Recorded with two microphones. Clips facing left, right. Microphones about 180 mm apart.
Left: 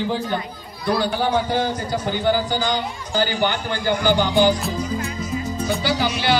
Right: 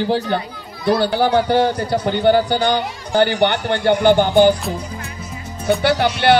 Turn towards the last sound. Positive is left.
turn(degrees=-60)  # may be behind; listen again after turning